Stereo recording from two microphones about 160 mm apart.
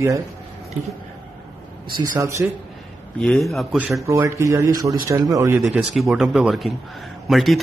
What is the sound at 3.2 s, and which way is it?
Speech, 5° left (ahead or behind).